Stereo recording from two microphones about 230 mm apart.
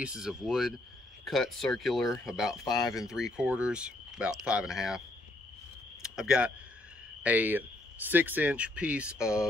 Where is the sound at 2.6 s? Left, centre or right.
Centre.